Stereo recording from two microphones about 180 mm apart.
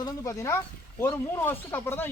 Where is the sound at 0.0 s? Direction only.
20° left (ahead or behind).